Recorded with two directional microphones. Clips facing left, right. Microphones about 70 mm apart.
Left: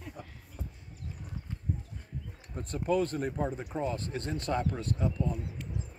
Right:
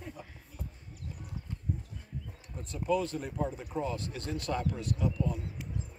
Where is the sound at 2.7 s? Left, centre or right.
Left.